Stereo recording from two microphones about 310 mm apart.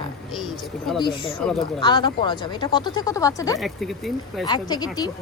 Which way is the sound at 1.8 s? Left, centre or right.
Centre.